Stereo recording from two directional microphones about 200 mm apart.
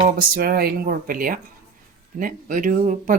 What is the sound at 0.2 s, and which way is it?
Speech, 50° right (ahead or behind).